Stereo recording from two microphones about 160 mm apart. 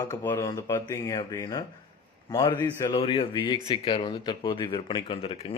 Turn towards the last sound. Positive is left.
turn(degrees=35)  # may be behind; listen again after turning